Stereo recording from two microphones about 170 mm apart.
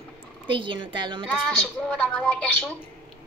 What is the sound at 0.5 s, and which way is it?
Speech, 30° right (ahead or behind).